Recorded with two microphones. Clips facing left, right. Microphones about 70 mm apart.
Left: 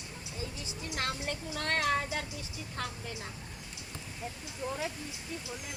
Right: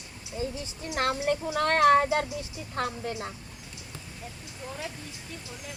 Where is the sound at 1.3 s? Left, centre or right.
Right.